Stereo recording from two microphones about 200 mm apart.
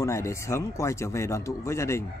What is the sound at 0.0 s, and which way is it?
A man's voice, 15° left (ahead or behind).